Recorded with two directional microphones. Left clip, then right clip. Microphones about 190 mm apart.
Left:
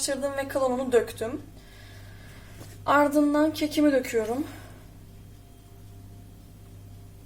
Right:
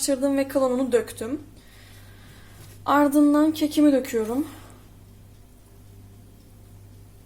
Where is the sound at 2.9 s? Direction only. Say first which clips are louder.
Right 2 dB; 30° right (ahead or behind).